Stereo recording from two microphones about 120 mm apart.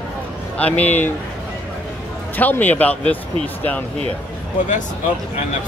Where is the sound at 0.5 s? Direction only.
10° left (ahead or behind).